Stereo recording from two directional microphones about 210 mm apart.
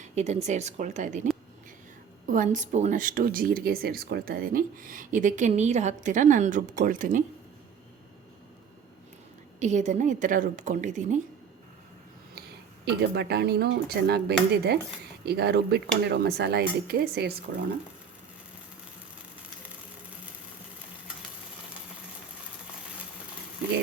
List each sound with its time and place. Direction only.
0.0 s a sound: 30° right (ahead or behind)
0.4 s speech: 35° right (ahead or behind)
9.6 s speech: 35° right (ahead or behind)
12.8 s speech: 50° right (ahead or behind)